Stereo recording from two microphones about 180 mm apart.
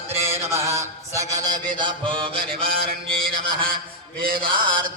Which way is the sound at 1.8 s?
25° right (ahead or behind).